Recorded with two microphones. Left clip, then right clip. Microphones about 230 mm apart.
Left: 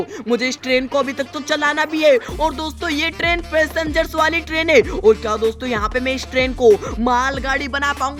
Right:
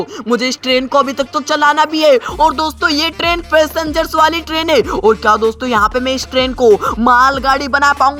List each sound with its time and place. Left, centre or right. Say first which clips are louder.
0.3 s music: right 4 dB; centre